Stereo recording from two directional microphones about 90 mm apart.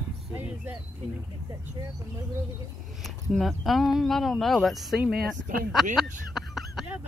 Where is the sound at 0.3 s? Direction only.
20° right (ahead or behind).